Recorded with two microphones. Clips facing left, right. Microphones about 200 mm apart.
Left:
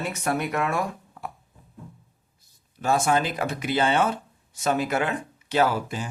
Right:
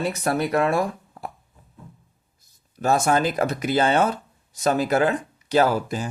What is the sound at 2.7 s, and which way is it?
Speech, 40° right (ahead or behind).